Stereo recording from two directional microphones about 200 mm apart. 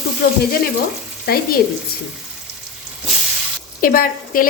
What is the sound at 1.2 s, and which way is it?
Speech, 50° left (ahead or behind).